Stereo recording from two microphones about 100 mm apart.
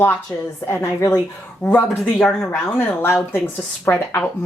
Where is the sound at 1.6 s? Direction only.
15° left (ahead or behind).